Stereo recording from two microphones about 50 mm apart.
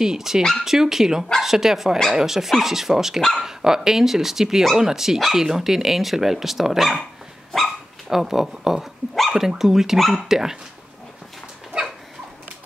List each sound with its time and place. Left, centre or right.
0.0 s speech: centre
11.7 s dog: right